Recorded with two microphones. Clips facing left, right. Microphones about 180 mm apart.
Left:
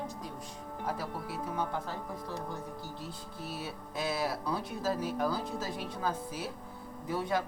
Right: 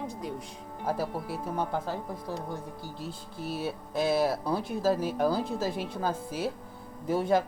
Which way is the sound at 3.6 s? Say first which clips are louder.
Right 8 dB; 25° right (ahead or behind).